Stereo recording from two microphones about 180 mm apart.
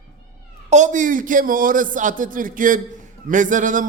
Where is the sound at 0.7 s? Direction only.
40° right (ahead or behind).